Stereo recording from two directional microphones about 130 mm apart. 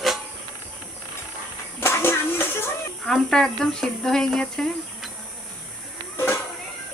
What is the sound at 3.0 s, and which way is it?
Speech, centre (ahead or behind).